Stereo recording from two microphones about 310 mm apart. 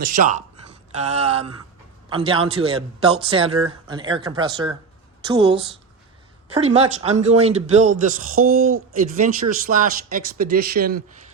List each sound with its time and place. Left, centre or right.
0.0 s a man's voice: right